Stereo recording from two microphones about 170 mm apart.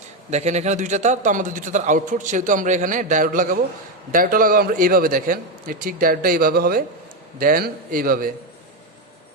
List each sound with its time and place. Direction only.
0.3 s a man's voice: 40° right (ahead or behind); by 8.3 s 55° right (ahead or behind)